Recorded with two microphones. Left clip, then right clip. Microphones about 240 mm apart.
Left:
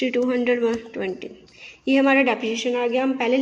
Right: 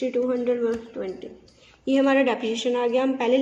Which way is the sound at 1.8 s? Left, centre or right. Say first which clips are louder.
Left 2 dB; centre.